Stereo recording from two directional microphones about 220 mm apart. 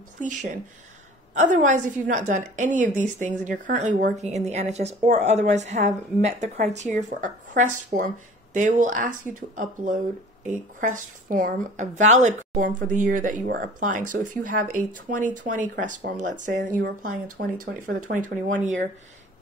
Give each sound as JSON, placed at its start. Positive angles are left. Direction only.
{"t": 0.2, "sound": "a woman's voice", "side_deg": -35}